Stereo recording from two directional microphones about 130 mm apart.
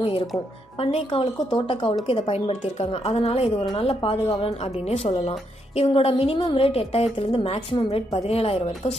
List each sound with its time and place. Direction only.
0.7 s a woman's voice: 45° left (ahead or behind)